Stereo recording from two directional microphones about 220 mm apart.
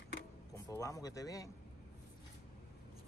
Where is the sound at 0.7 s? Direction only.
15° left (ahead or behind).